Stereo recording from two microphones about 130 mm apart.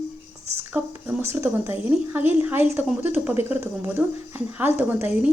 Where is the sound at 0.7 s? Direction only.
15° right (ahead or behind).